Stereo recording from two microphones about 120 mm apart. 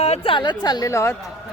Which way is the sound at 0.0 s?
55° left (ahead or behind).